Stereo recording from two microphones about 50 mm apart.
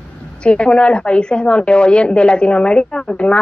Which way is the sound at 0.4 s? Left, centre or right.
Left.